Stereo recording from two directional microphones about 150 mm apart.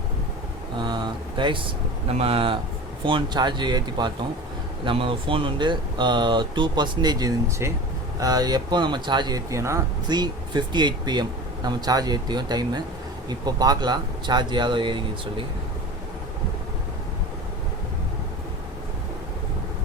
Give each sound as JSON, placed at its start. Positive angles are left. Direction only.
{"t": 0.8, "sound": "speech", "side_deg": -30}